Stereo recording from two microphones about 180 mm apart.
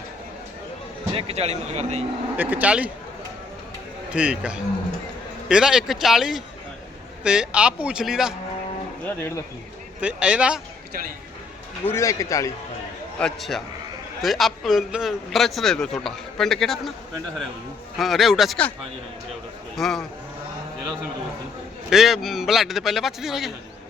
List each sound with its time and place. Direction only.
1.1 s speech: 35° right (ahead or behind)
2.3 s speech: 10° right (ahead or behind)
4.1 s a man's voice: 5° right (ahead or behind)
9.0 s a man's voice: 15° left (ahead or behind)
10.0 s a man's voice: 5° right (ahead or behind)
11.9 s a man's voice: 15° left (ahead or behind)
13.1 s a man's voice: centre (ahead or behind)
17.9 s a man's voice: centre (ahead or behind)
21.8 s a man's voice: centre (ahead or behind)